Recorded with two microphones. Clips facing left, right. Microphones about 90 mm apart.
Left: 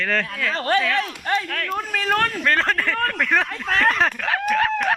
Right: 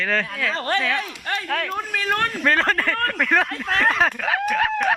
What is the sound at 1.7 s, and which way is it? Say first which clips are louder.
Speech: left 2 dB; 5° right (ahead or behind).